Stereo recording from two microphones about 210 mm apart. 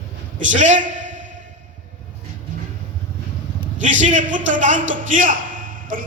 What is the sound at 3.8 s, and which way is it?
A man's voice, 35° right (ahead or behind).